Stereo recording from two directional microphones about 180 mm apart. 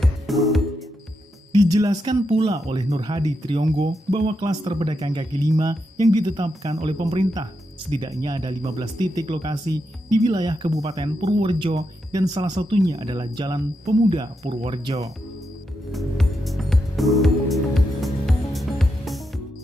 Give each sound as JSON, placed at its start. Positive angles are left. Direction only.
{"t": 0.0, "sound": "music", "side_deg": 0}
{"t": 1.5, "sound": "speech", "side_deg": -20}
{"t": 15.9, "sound": "music", "side_deg": 0}